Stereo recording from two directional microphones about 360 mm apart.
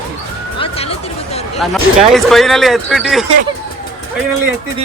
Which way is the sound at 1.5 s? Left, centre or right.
Centre.